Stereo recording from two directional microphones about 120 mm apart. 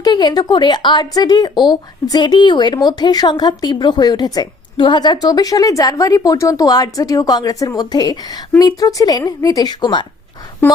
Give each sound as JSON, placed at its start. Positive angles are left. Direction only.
{"t": 0.0, "sound": "speech", "side_deg": 35}